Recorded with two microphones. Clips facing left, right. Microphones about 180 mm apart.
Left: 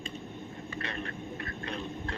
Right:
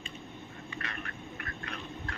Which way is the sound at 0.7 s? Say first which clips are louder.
Left 5 dB; 30° left (ahead or behind).